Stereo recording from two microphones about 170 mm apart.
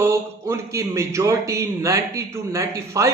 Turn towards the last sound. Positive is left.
turn(degrees=-15)  # may be behind; listen again after turning